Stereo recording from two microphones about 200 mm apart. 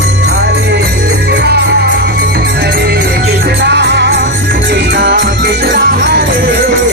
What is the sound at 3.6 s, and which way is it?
Music, 60° right (ahead or behind).